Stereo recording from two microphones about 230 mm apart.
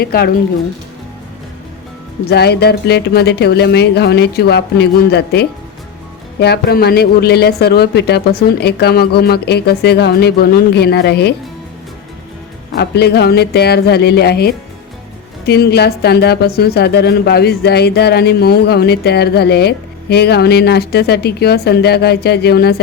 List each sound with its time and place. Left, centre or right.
0.0 s speech: left
2.3 s speech: left
12.7 s speech: left